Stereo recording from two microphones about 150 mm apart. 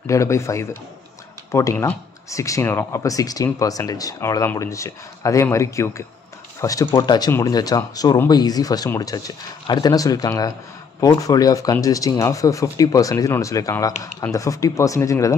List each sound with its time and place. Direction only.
0.0 s speech: 20° left (ahead or behind)